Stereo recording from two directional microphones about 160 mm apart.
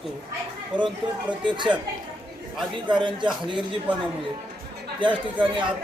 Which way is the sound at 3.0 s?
30° right (ahead or behind).